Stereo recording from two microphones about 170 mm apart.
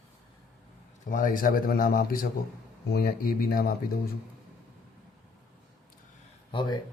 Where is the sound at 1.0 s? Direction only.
50° left (ahead or behind).